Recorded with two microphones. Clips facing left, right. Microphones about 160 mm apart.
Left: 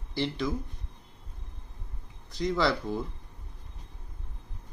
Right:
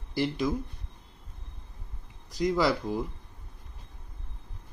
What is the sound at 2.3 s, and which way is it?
Speech, 15° right (ahead or behind).